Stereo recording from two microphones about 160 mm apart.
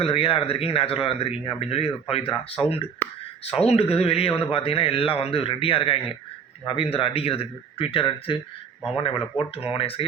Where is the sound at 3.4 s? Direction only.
40° left (ahead or behind).